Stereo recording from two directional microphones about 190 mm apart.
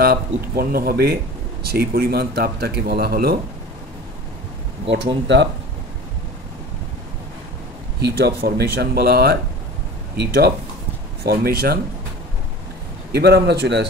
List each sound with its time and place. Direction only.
0.0 s speech: 55° right (ahead or behind)
4.9 s speech: 70° right (ahead or behind)
8.0 s speech: 55° right (ahead or behind)
13.1 s speech: 60° right (ahead or behind)